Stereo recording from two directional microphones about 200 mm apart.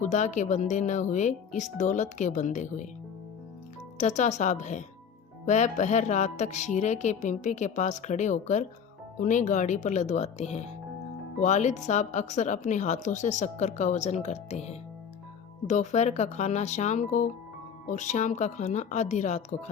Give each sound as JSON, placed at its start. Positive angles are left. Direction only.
{"t": 0.0, "sound": "speech", "side_deg": 35}
{"t": 3.9, "sound": "speech", "side_deg": 35}